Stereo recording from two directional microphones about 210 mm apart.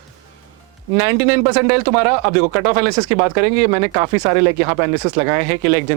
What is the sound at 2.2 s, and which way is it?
Speech, 15° right (ahead or behind).